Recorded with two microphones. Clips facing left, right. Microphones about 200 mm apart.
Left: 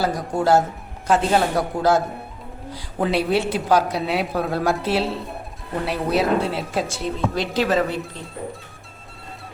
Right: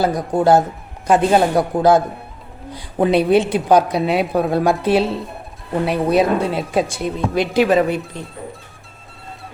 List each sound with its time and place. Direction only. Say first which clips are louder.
0.0 s a woman's voice: right 5 dB; 20° right (ahead or behind)